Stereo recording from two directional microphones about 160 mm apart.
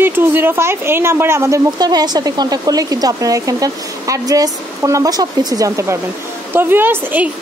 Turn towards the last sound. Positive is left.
turn(degrees=-10)  # may be behind; listen again after turning